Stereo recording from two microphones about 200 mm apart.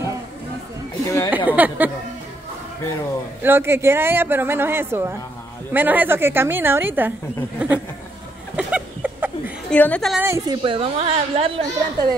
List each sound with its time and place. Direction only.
1.0 s a sound: 15° left (ahead or behind)
1.5 s a woman's voice: 10° right (ahead or behind)
3.4 s a woman's voice: 10° right (ahead or behind)
8.5 s a sound: 5° right (ahead or behind)
9.7 s a woman's voice: 5° left (ahead or behind)
10.2 s a woman's voice: 15° right (ahead or behind)
10.6 s a woman's voice: 25° right (ahead or behind)